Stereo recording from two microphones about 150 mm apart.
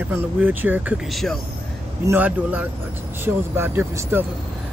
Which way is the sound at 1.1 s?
Centre (ahead or behind).